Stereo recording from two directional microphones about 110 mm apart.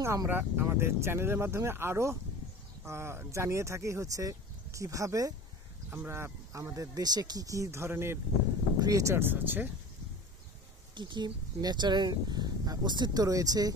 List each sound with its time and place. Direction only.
0.0 s speech: 25° right (ahead or behind)
8.7 s speech: 35° right (ahead or behind); by 9.7 s 15° right (ahead or behind)
11.0 s speech: 45° right (ahead or behind)